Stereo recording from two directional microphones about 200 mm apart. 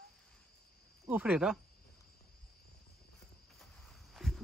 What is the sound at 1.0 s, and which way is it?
Speech, 5° right (ahead or behind).